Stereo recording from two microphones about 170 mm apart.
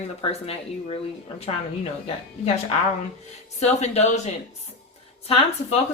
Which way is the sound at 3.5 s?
40° left (ahead or behind).